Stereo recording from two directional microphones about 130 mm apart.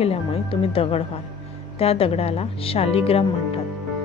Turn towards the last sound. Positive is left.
turn(degrees=50)  # may be behind; listen again after turning